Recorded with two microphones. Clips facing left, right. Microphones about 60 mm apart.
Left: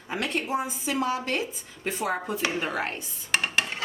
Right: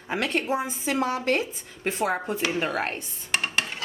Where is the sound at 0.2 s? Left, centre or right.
Right.